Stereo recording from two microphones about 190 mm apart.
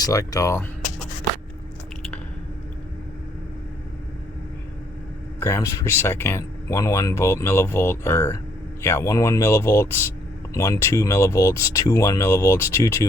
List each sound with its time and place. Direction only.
0.0 s speech: 20° left (ahead or behind)
5.4 s speech: 15° left (ahead or behind)